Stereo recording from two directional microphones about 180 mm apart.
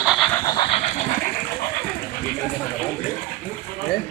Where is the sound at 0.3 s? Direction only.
20° left (ahead or behind).